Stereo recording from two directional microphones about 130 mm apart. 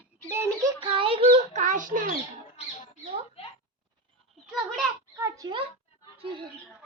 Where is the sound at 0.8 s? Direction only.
40° right (ahead or behind).